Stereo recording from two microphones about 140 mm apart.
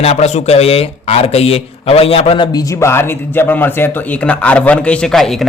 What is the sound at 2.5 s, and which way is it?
A man's voice, 25° left (ahead or behind).